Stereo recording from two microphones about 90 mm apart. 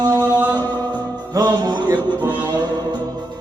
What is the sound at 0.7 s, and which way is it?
Music, 50° right (ahead or behind).